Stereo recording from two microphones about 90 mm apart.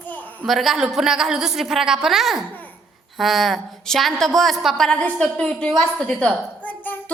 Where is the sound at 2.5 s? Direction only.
20° left (ahead or behind).